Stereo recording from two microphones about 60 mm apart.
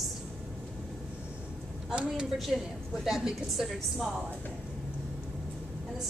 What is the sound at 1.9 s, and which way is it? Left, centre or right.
Speech, centre.